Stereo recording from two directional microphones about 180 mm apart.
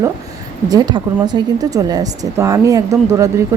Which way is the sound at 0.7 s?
20° right (ahead or behind).